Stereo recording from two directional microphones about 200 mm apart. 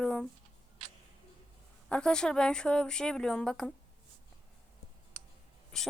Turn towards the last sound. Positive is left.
turn(degrees=5)  # may be behind; listen again after turning